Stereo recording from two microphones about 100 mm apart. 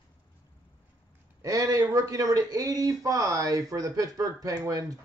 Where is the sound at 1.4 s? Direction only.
35° right (ahead or behind).